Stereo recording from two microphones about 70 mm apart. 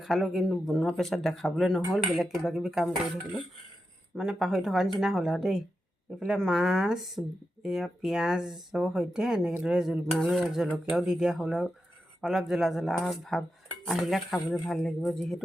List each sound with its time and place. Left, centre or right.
0.0 s speech: centre
4.1 s speech: centre